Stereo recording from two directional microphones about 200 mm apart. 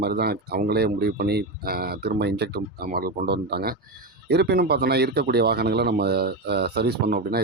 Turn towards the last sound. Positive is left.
turn(degrees=-55)  # may be behind; listen again after turning